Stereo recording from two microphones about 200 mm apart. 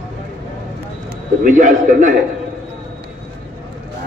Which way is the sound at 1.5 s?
40° right (ahead or behind).